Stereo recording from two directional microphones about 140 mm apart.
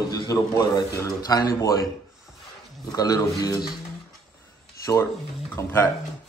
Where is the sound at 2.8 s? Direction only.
25° left (ahead or behind).